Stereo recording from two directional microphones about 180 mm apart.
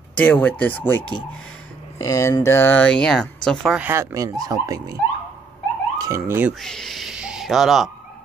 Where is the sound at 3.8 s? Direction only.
15° right (ahead or behind).